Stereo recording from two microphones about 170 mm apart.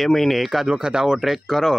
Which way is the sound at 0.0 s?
Centre (ahead or behind).